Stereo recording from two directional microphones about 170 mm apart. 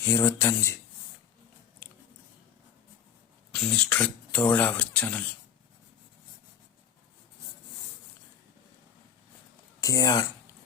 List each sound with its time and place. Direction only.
0.0 s speech: 15° left (ahead or behind)
3.5 s speech: 5° left (ahead or behind)
9.8 s speech: 20° left (ahead or behind)